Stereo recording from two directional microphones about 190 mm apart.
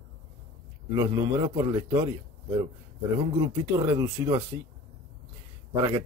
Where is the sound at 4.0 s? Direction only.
25° right (ahead or behind).